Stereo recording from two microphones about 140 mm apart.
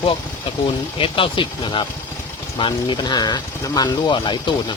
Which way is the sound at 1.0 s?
40° left (ahead or behind).